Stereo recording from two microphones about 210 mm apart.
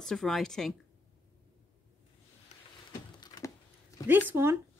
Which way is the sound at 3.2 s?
20° left (ahead or behind).